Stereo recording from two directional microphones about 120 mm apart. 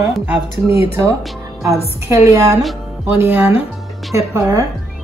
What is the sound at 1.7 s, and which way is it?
A woman's voice, 25° right (ahead or behind).